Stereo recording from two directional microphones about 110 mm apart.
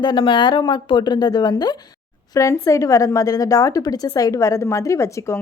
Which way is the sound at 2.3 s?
30° left (ahead or behind).